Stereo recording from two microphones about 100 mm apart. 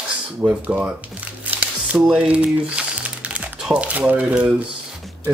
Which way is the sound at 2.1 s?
10° right (ahead or behind).